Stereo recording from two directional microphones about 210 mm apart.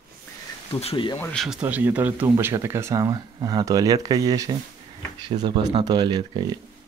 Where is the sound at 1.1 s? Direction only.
5° left (ahead or behind); by 6.6 s 20° right (ahead or behind).